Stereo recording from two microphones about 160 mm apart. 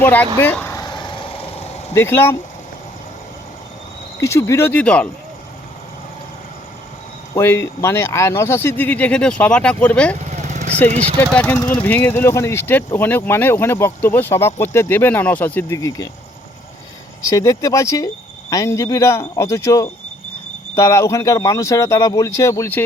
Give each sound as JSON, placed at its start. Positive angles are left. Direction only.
{"t": 0.0, "sound": "speech", "side_deg": 10}
{"t": 0.8, "sound": "vehicle", "side_deg": 25}
{"t": 1.9, "sound": "speech", "side_deg": 15}
{"t": 4.2, "sound": "speech", "side_deg": 20}
{"t": 7.3, "sound": "speech", "side_deg": 15}
{"t": 10.5, "sound": "vehicle", "side_deg": -50}
{"t": 10.8, "sound": "speech", "side_deg": -45}
{"t": 11.2, "sound": "speech", "side_deg": 10}
{"t": 17.2, "sound": "speech", "side_deg": 20}